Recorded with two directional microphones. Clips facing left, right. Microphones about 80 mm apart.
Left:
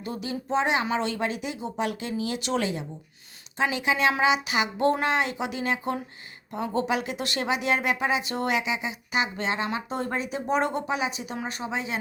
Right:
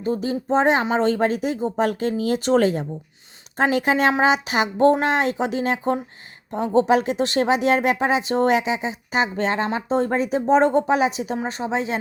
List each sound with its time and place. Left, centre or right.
0.0 s a woman's voice: right